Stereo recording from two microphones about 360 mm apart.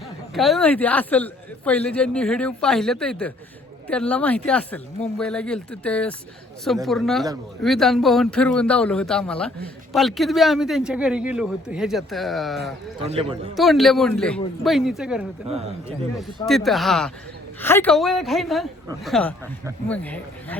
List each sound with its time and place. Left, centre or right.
0.3 s a man's voice: centre
13.1 s a man's voice: centre
13.6 s a man's voice: centre
15.4 s a man's voice: centre
16.5 s a man's voice: centre